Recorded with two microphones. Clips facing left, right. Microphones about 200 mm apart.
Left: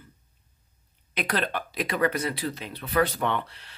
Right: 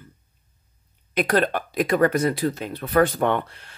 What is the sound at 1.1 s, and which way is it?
Speech, 45° right (ahead or behind).